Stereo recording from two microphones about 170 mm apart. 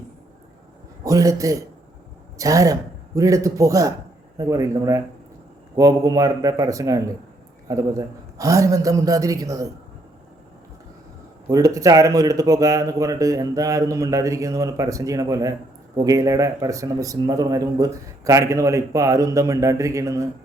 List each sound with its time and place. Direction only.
1.0 s a man's voice: 20° right (ahead or behind)
11.4 s a man's voice: 20° right (ahead or behind)